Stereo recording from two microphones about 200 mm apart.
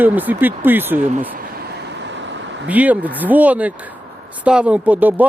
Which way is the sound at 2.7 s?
10° right (ahead or behind).